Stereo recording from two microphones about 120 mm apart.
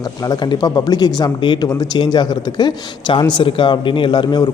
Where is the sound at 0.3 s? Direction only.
35° left (ahead or behind).